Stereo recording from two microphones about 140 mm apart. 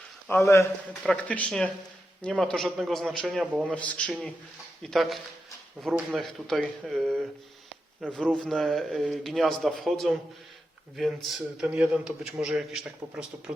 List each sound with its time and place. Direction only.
0.3 s a man's voice: 15° left (ahead or behind); by 3.8 s 10° right (ahead or behind)
3.8 s a man's voice: 10° left (ahead or behind); by 13.2 s 5° right (ahead or behind)